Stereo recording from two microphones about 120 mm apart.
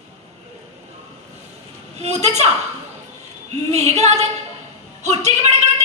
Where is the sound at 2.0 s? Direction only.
65° right (ahead or behind).